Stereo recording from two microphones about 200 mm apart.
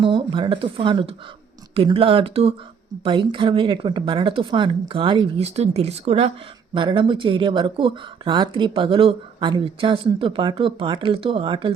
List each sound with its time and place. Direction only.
0.0 s speech: 25° right (ahead or behind)